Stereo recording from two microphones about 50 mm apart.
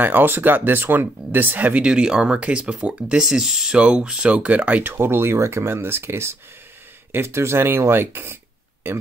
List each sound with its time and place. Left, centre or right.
0.0 s speech: right
1.8 s speech: centre
3.3 s speech: centre; by 4.8 s right
4.8 s speech: right